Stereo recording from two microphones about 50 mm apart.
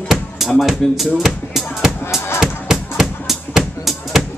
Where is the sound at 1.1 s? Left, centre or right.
Centre.